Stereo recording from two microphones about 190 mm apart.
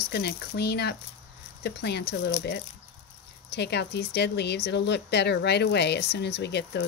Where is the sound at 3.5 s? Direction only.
60° left (ahead or behind).